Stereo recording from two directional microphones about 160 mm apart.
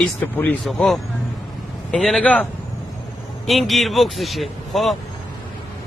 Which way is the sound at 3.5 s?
Centre (ahead or behind).